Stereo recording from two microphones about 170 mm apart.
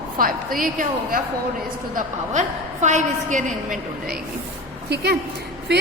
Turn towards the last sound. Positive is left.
turn(degrees=-85)